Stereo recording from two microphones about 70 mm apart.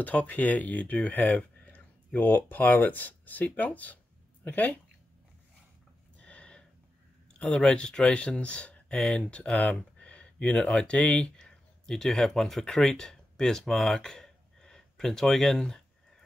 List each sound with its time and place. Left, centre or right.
0.0 s speech: left
6.1 s a sound: centre
7.3 s speech: centre